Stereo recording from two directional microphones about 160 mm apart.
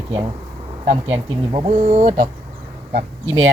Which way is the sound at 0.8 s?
35° right (ahead or behind).